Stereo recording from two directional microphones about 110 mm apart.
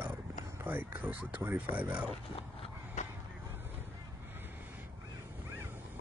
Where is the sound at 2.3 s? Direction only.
75° left (ahead or behind).